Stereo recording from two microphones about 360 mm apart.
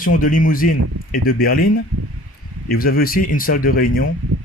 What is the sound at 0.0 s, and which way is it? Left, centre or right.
Speech, left.